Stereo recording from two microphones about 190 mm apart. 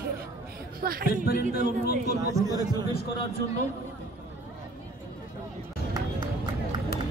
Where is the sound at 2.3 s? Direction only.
20° right (ahead or behind).